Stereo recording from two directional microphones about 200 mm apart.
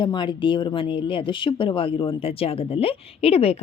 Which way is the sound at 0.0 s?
25° left (ahead or behind).